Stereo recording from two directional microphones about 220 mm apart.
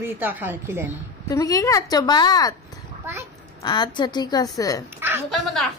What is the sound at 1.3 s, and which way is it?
A woman's voice, 15° left (ahead or behind).